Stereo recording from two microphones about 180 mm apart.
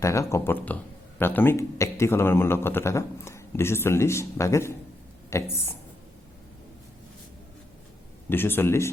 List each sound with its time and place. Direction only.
0.0 s speech: 15° left (ahead or behind)
8.3 s speech: 10° left (ahead or behind)